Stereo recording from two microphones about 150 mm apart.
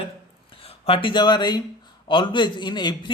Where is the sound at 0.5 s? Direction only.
40° left (ahead or behind).